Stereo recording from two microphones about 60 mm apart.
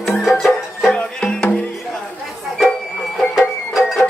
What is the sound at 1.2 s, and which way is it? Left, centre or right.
Music, centre.